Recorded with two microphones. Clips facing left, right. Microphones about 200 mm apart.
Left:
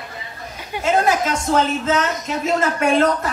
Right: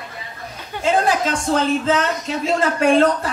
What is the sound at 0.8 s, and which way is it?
A woman's voice, 30° right (ahead or behind).